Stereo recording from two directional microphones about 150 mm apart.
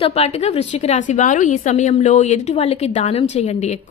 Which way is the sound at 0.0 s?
40° left (ahead or behind).